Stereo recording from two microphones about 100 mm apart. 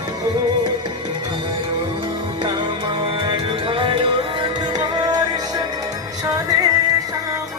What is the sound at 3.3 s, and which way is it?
Music, 60° right (ahead or behind).